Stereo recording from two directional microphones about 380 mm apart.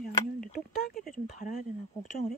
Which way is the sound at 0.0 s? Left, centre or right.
Left.